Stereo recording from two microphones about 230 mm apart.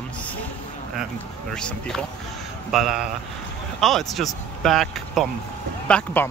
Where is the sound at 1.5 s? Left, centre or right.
Centre.